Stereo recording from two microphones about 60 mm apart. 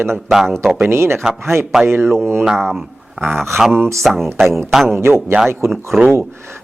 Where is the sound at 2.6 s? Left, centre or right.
Centre.